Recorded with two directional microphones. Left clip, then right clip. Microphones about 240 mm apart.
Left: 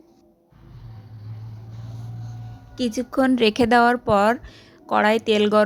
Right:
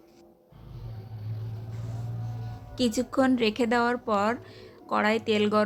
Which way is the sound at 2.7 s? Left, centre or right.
Centre.